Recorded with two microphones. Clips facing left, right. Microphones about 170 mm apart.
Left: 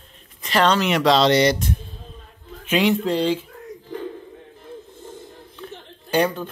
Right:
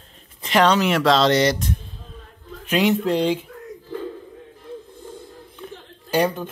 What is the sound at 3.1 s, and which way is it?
Speech, 15° right (ahead or behind).